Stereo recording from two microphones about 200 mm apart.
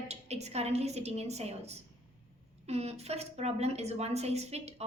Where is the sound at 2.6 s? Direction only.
30° right (ahead or behind).